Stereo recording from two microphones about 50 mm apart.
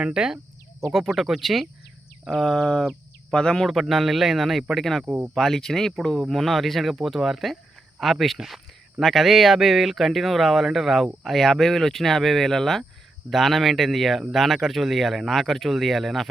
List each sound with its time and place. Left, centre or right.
0.0 s speech: centre
0.9 s speech: centre
2.4 s a sound: centre
3.6 s speech: centre
5.0 s speech: right
5.3 s speech: centre